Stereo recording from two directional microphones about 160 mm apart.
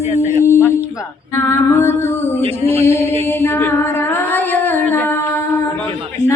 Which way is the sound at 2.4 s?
40° right (ahead or behind).